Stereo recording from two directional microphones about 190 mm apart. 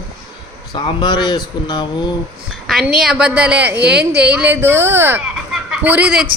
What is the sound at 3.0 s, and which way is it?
A woman's voice, 5° right (ahead or behind).